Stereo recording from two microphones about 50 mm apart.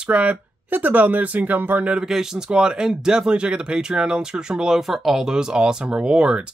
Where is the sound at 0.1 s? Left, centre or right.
Right.